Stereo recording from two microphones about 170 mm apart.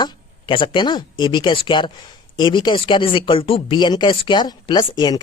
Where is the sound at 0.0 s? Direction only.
25° left (ahead or behind).